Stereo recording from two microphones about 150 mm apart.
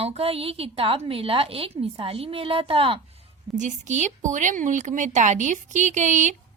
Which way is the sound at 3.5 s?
55° right (ahead or behind).